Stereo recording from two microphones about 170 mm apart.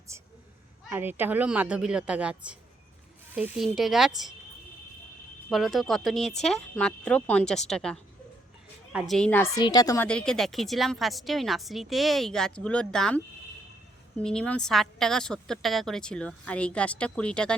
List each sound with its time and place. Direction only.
0.1 s a man's voice: 15° right (ahead or behind)
5.5 s a woman's voice: centre (ahead or behind)
9.6 s a woman's voice: 25° left (ahead or behind)
10.1 s a woman's voice: 5° left (ahead or behind)